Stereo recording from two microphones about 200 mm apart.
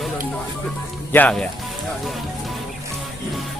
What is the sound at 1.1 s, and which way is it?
Speech, 5° left (ahead or behind).